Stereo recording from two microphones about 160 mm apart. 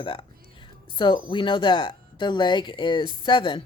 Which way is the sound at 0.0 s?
35° left (ahead or behind).